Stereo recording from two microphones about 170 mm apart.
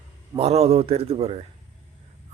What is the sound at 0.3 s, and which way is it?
Speech, 40° right (ahead or behind).